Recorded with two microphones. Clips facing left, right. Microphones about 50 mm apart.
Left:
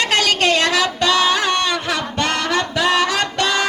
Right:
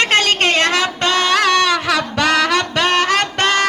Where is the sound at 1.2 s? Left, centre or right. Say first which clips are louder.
Right 3 dB; right.